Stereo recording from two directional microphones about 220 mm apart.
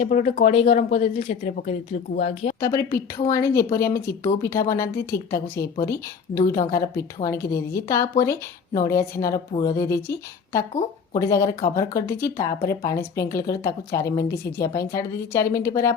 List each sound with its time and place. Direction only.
0.0 s speech: 35° left (ahead or behind)
2.6 s speech: 15° left (ahead or behind)